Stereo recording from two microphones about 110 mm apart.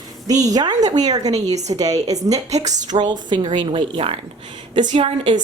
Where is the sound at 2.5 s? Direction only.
90° right.